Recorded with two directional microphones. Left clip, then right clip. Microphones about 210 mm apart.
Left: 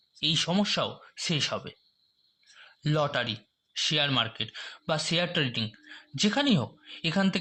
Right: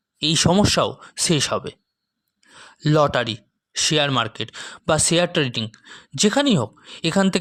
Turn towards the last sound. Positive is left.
turn(degrees=-50)  # may be behind; listen again after turning